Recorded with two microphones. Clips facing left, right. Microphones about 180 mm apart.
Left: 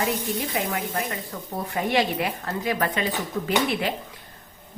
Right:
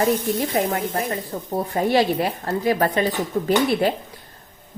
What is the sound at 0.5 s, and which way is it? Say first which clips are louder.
A woman's voice: right 5 dB; 40° right (ahead or behind).